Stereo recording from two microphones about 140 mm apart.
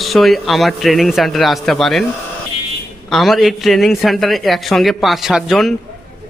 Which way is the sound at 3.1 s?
Centre (ahead or behind).